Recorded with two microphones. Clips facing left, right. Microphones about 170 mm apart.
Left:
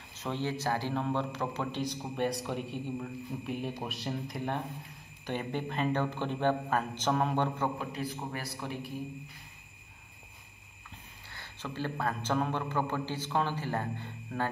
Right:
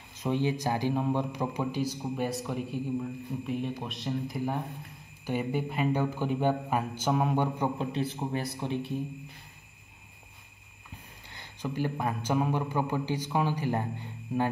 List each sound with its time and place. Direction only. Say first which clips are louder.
0.2 s a man's voice: right 5 dB; 15° right (ahead or behind)
7.8 s a man's voice: right 5 dB; 25° right (ahead or behind)
11.3 s a man's voice: right 5 dB; 15° right (ahead or behind)